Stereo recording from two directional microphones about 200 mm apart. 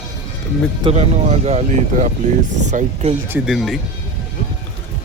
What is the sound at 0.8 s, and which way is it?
Speech, 30° right (ahead or behind).